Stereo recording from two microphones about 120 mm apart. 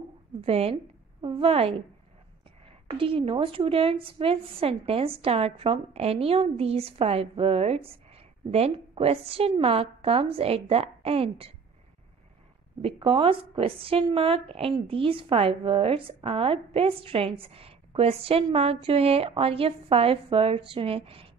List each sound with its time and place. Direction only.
0.4 s a woman's voice: 55° right (ahead or behind)
12.8 s speech: 50° right (ahead or behind)